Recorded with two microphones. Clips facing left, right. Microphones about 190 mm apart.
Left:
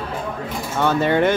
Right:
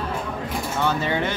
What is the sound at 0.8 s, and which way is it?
Speech, 55° left (ahead or behind).